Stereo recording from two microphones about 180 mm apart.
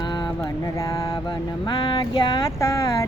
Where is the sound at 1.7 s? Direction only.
25° left (ahead or behind).